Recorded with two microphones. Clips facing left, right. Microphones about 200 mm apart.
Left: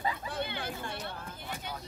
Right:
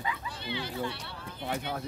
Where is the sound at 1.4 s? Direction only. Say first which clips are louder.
Right 9 dB; 60° right (ahead or behind).